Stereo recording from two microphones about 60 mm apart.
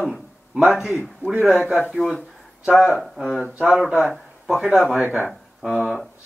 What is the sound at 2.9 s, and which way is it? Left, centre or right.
Speech, centre.